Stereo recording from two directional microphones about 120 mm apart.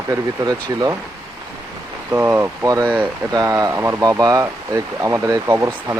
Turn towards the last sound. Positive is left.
turn(degrees=-20)  # may be behind; listen again after turning